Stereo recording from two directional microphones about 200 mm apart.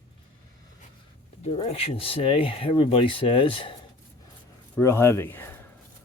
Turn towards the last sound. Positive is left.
turn(degrees=10)  # may be behind; listen again after turning